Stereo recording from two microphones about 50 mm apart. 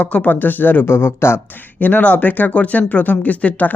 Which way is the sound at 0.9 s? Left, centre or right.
Left.